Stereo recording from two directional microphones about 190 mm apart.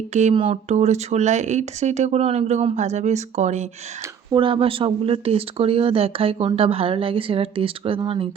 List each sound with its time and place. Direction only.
0.1 s speech: 40° right (ahead or behind)
4.3 s speech: 25° right (ahead or behind)